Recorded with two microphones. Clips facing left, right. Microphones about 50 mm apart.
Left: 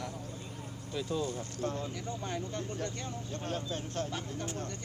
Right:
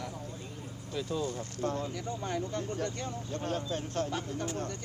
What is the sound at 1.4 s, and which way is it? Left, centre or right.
Speech, right.